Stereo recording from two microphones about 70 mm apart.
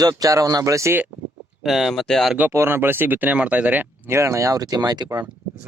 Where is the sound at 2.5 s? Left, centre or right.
Right.